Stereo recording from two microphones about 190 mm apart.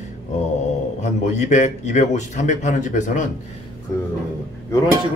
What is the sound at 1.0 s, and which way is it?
A man's voice, 40° left (ahead or behind).